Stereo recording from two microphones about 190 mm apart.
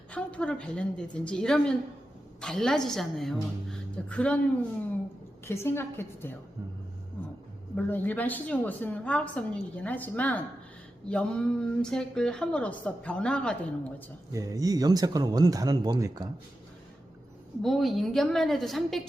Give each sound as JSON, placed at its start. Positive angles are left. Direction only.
{"t": 0.1, "sound": "speech", "side_deg": 5}
{"t": 3.7, "sound": "music", "side_deg": 5}
{"t": 5.5, "sound": "a woman's voice", "side_deg": 15}
{"t": 7.2, "sound": "a sound", "side_deg": 10}
{"t": 7.8, "sound": "a woman's voice", "side_deg": 10}
{"t": 14.3, "sound": "speech", "side_deg": -20}
{"t": 17.6, "sound": "speech", "side_deg": 0}